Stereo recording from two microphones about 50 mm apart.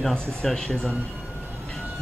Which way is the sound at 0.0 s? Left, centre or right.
Centre.